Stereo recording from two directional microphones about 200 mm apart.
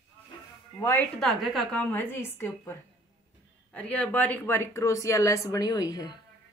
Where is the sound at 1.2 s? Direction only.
Centre (ahead or behind); by 6.2 s 20° left (ahead or behind).